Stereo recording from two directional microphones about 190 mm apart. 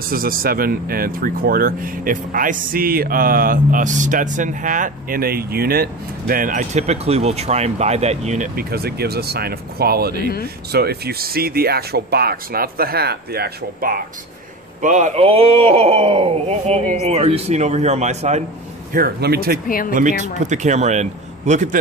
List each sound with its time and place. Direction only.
0.1 s speech: 50° right (ahead or behind)
14.8 s speech: 40° right (ahead or behind)
18.9 s speech: 55° right (ahead or behind)
19.9 s speech: 40° right (ahead or behind)